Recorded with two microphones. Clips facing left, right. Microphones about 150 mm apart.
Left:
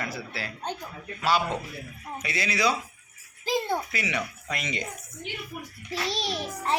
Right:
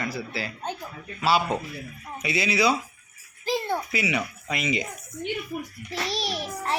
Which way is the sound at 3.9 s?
10° right (ahead or behind).